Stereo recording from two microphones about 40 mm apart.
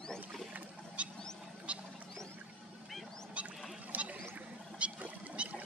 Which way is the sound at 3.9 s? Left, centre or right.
Right.